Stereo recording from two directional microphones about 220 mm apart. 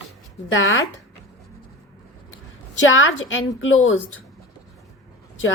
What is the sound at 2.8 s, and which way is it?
A woman's voice, 60° left (ahead or behind).